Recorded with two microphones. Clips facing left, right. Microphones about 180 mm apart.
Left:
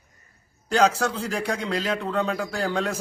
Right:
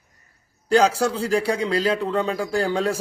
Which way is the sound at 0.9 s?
30° right (ahead or behind).